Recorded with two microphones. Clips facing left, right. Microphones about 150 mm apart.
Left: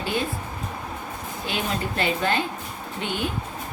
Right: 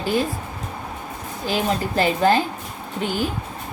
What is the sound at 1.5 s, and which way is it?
A woman's voice, 35° right (ahead or behind).